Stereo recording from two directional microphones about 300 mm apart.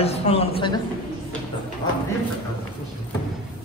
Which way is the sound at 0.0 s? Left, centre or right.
Left.